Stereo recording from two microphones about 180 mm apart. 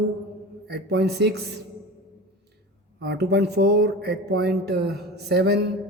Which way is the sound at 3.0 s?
65° right (ahead or behind).